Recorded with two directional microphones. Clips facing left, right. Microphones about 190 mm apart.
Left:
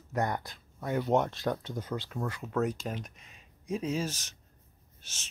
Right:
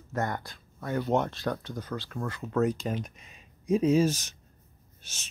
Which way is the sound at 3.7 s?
15° right (ahead or behind).